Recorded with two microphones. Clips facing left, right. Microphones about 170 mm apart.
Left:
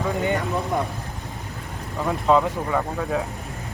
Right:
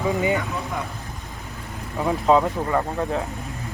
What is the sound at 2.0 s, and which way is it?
Speech, 5° right (ahead or behind).